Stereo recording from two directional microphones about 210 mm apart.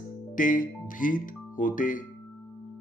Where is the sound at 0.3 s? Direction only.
40° left (ahead or behind).